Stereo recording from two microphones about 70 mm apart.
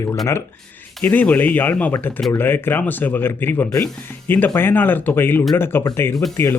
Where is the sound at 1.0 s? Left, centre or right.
Left.